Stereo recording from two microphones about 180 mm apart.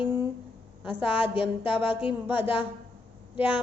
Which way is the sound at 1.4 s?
10° right (ahead or behind).